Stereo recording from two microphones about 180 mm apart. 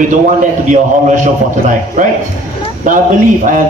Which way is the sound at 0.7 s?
45° right (ahead or behind).